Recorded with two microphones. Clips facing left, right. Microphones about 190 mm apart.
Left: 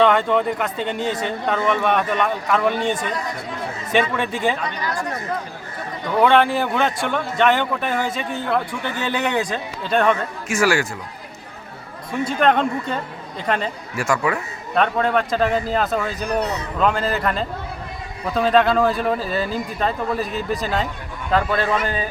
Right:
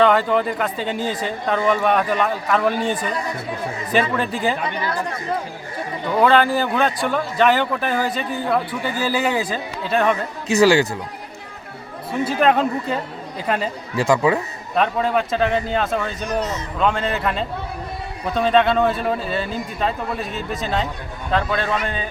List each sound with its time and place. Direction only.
0.0 s a man's voice: 5° right (ahead or behind)
3.9 s a man's voice: centre (ahead or behind)
6.2 s a man's voice: centre (ahead or behind)
12.2 s a man's voice: 5° right (ahead or behind)
13.9 s speech: 20° right (ahead or behind)
14.8 s a man's voice: centre (ahead or behind)
16.4 s a man's voice: 65° left (ahead or behind)
16.8 s a man's voice: centre (ahead or behind)